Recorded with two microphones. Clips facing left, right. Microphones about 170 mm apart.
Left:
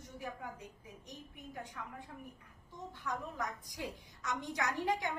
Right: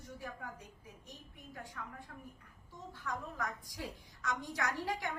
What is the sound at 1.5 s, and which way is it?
A woman's voice, 20° left (ahead or behind).